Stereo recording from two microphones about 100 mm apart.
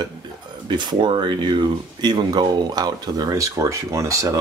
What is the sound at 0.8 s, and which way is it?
Speech, 50° right (ahead or behind).